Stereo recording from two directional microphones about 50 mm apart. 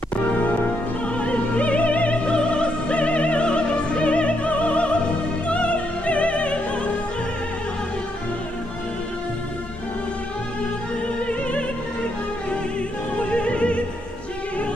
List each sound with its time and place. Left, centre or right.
0.2 s music: left
1.0 s opera: left
13.2 s opera: left